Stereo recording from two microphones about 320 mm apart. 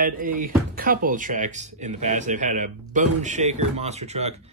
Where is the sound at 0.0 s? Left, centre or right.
Right.